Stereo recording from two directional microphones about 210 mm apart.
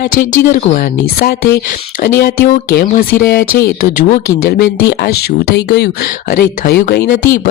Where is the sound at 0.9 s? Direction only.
50° left (ahead or behind).